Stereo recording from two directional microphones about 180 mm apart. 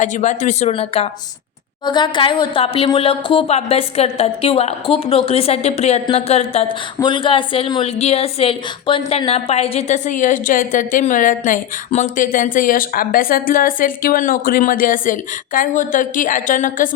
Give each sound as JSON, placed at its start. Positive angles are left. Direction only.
{"t": 0.0, "sound": "speech", "side_deg": 40}